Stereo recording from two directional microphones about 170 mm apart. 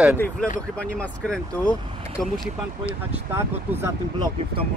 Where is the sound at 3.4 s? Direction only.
15° right (ahead or behind).